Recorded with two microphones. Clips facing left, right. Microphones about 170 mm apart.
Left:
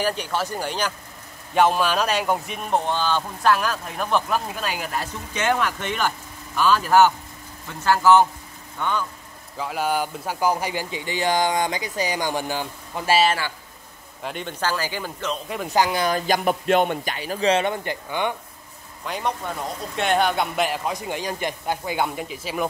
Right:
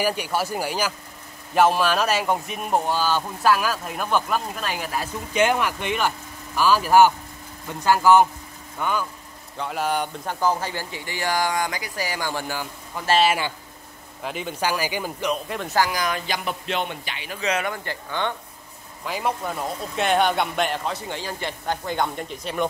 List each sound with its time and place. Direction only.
0.0 s speech: 10° right (ahead or behind)
5.3 s speech: 10° right (ahead or behind); by 13.1 s 20° left (ahead or behind)
14.2 s speech: 5° right (ahead or behind)
14.6 s speech: 15° right (ahead or behind)
15.4 s speech: centre (ahead or behind)
15.7 s speech: 25° left (ahead or behind)
16.3 s a man's voice: 50° left (ahead or behind); by 17.9 s 25° left (ahead or behind)
19.0 s speech: 5° right (ahead or behind)